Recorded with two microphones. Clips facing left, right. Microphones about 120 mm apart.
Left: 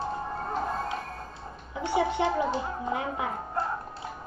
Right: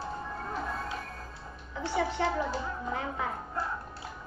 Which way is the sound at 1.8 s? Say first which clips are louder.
Left 4 dB; 20° left (ahead or behind).